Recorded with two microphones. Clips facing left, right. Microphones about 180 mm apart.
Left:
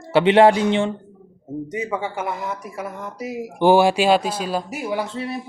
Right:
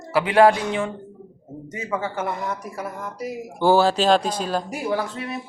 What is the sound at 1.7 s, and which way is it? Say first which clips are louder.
Speech: even; 15° left (ahead or behind).